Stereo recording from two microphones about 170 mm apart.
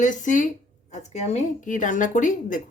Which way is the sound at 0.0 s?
50° left (ahead or behind).